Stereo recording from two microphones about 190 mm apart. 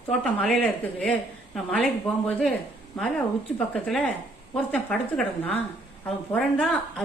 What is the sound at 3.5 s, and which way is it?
A woman's voice, 5° left (ahead or behind).